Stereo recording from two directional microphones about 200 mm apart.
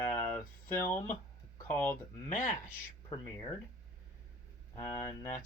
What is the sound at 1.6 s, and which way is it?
Speech, 10° left (ahead or behind).